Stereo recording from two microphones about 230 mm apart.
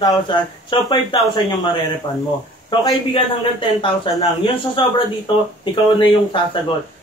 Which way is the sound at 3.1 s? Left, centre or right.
Left.